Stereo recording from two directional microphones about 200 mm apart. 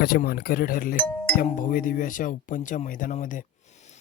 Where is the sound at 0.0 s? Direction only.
50° left (ahead or behind).